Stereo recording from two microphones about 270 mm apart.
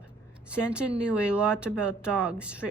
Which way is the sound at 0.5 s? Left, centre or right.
Centre.